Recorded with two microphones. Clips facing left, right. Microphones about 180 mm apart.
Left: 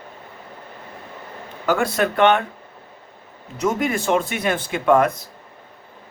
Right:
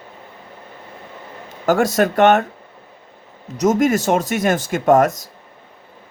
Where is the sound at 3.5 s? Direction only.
40° right (ahead or behind).